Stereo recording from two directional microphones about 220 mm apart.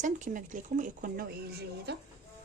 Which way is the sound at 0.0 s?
35° right (ahead or behind).